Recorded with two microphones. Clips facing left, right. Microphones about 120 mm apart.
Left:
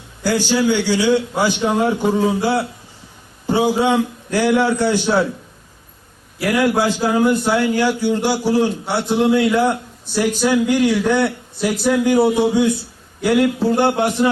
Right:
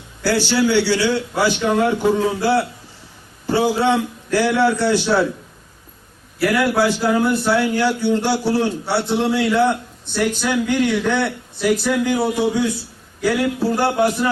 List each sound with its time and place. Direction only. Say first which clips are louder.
0.2 s a man's voice: even; 15° left (ahead or behind)
6.4 s a man's voice: even; 15° left (ahead or behind)
13.7 s a man's voice: left 1 dB; 20° left (ahead or behind)